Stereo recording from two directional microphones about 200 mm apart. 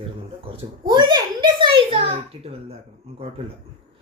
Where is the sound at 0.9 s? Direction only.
20° right (ahead or behind).